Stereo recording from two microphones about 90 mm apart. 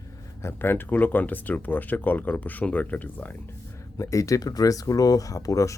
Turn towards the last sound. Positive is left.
turn(degrees=35)  # may be behind; listen again after turning